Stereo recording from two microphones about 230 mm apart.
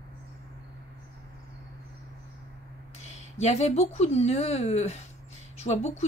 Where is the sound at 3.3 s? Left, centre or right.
Left.